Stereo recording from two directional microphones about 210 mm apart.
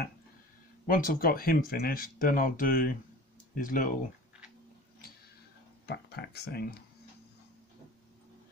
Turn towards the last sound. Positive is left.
turn(degrees=50)  # may be behind; listen again after turning